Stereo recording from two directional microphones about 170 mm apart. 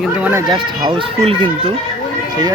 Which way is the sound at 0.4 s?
25° right (ahead or behind).